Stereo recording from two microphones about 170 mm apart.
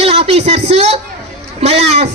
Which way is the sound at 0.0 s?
35° right (ahead or behind).